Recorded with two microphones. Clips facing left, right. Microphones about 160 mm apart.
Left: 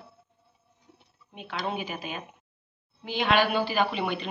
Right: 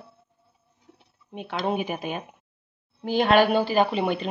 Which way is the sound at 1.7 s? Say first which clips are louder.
Right 6 dB; 55° right (ahead or behind).